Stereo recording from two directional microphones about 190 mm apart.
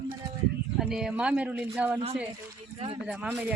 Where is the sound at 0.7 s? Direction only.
5° right (ahead or behind).